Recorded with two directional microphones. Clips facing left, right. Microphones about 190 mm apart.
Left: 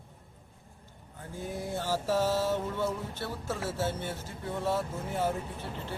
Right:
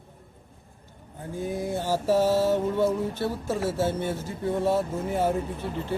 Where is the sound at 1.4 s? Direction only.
15° right (ahead or behind).